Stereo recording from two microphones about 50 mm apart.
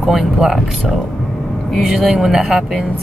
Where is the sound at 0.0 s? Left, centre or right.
Centre.